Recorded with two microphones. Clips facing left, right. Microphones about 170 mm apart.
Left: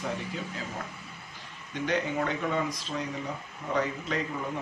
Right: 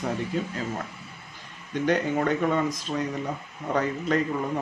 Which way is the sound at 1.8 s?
50° right (ahead or behind).